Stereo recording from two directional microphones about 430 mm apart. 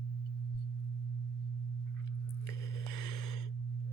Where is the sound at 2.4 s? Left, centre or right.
Left.